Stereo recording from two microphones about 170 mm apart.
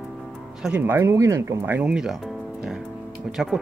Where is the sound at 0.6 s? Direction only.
10° right (ahead or behind).